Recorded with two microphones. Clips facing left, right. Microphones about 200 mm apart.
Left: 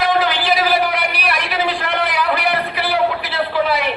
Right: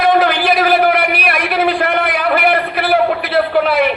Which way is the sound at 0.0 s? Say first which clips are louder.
Right 5 dB; 55° right (ahead or behind).